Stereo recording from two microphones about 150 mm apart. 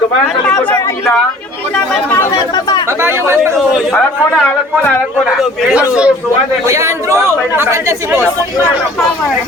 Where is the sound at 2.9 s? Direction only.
15° right (ahead or behind).